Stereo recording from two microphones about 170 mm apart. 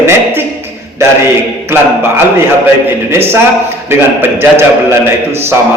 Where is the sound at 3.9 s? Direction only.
15° right (ahead or behind).